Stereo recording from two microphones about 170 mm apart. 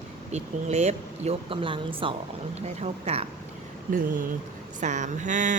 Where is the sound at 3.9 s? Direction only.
50° right (ahead or behind).